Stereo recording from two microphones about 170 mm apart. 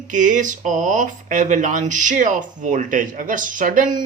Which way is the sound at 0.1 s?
50° right (ahead or behind).